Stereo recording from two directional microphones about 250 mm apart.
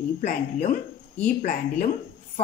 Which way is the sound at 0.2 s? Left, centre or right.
Left.